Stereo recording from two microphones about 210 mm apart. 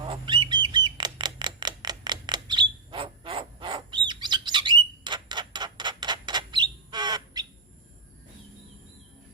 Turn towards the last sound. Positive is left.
turn(degrees=-20)  # may be behind; listen again after turning